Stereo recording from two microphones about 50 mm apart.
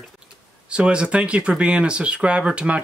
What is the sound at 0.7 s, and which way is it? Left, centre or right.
Speech, right.